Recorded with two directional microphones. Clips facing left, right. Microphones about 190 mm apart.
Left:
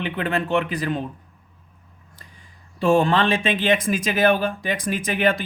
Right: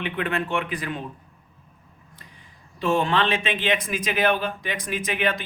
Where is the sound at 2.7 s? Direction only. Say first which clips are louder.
Left 4 dB; 30° left (ahead or behind).